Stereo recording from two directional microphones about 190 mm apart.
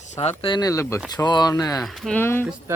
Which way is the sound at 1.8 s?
Centre (ahead or behind).